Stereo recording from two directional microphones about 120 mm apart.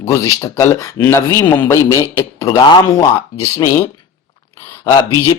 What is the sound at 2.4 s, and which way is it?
Speech, 40° left (ahead or behind).